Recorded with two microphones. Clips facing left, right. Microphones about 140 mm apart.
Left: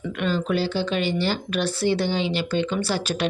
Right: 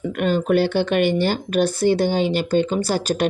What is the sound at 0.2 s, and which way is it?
Speech, 50° right (ahead or behind).